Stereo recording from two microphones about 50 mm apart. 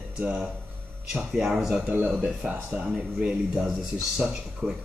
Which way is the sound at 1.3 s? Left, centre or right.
Centre.